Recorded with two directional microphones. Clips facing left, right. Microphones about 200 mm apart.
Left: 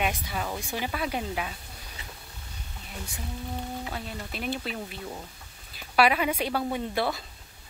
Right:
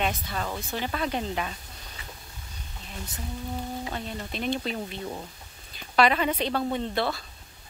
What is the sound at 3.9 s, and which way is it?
Speech, 5° left (ahead or behind).